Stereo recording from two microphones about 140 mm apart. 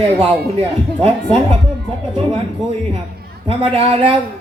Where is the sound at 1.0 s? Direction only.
40° right (ahead or behind).